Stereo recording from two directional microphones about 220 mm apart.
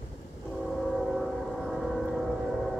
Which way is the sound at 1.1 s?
Centre (ahead or behind).